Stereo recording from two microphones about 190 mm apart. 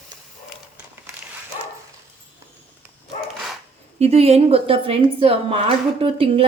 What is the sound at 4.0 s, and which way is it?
A woman's voice, 35° right (ahead or behind).